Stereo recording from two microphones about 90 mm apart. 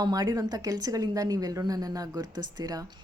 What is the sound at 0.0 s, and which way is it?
A woman's voice, 45° right (ahead or behind).